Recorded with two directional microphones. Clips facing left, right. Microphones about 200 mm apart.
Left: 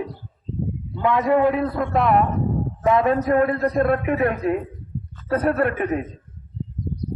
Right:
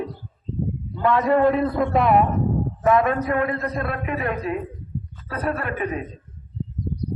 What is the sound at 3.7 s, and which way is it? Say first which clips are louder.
Speech: left 7 dB; 55° left (ahead or behind).